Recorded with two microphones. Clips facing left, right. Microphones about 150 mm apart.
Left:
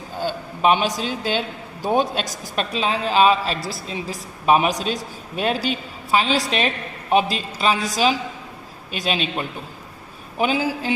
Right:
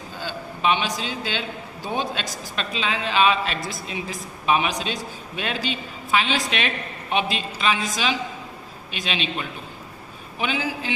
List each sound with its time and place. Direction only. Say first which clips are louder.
0.2 s a man's voice: left 6 dB; 45° left (ahead or behind)